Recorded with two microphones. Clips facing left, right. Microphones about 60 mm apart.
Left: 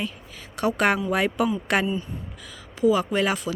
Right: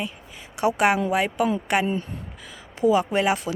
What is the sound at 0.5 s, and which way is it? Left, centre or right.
Speech, centre.